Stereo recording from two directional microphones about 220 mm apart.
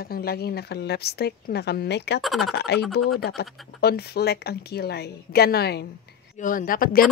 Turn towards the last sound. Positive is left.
turn(degrees=40)  # may be behind; listen again after turning